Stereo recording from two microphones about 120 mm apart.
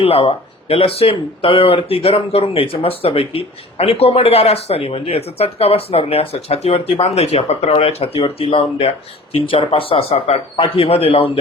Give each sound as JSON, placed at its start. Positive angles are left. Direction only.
{"t": 0.0, "sound": "speech", "side_deg": 55}